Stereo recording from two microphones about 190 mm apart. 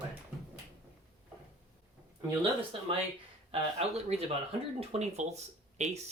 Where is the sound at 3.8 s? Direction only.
35° right (ahead or behind).